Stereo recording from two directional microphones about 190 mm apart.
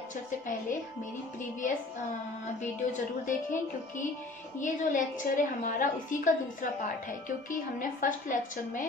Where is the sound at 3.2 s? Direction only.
40° left (ahead or behind).